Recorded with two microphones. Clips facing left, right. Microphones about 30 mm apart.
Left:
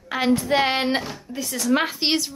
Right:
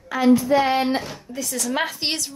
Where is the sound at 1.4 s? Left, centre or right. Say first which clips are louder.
Left 3 dB; centre.